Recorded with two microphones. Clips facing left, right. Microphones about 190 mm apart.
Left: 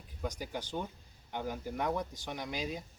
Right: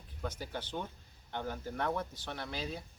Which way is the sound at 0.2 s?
10° left (ahead or behind).